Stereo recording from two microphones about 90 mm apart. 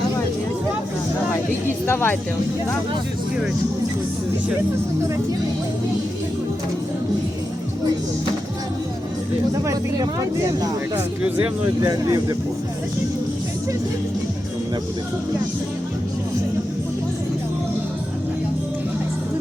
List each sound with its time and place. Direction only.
1.3 s speech: 25° left (ahead or behind)
11.8 s speech: 45° right (ahead or behind)